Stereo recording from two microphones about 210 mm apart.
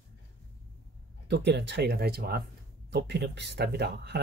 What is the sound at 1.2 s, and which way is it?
Speech, 55° right (ahead or behind).